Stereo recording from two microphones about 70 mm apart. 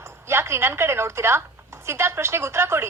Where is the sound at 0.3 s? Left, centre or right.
Right.